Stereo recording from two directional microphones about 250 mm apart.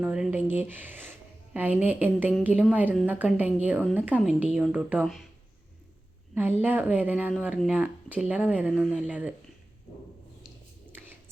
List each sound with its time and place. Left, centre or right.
0.0 s a woman's voice: centre
6.3 s speech: centre